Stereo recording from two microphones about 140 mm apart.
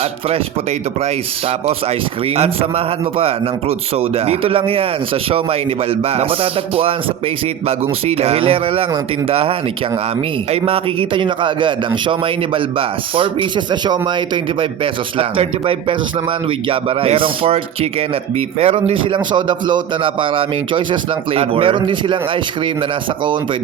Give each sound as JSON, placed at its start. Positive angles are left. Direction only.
{"t": 0.0, "sound": "a man's voice", "side_deg": -45}
{"t": 15.2, "sound": "a man's voice", "side_deg": -40}